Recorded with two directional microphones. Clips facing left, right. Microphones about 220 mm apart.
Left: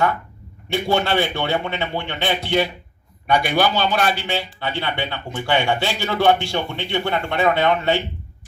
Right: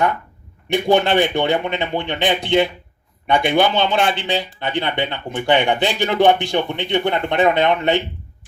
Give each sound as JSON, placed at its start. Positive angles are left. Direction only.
{"t": 0.7, "sound": "speech", "side_deg": -15}